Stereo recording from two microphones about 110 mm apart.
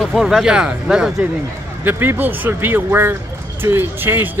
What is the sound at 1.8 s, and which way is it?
Speech, 20° right (ahead or behind).